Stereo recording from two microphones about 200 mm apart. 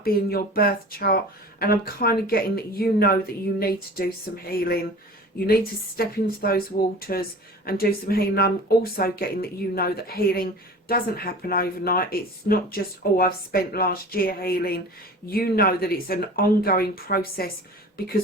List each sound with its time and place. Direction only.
0.0 s speech: 50° left (ahead or behind)
6.0 s speech: 45° left (ahead or behind)